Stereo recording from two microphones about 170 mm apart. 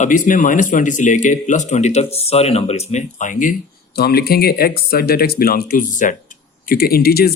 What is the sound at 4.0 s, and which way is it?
Speech, 65° left (ahead or behind).